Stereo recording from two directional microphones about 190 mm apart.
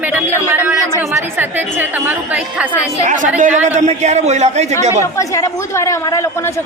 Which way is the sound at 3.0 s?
40° right (ahead or behind).